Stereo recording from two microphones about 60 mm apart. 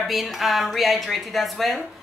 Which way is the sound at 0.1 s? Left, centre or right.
Centre.